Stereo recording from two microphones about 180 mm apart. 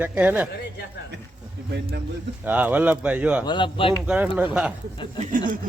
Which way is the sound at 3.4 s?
25° left (ahead or behind).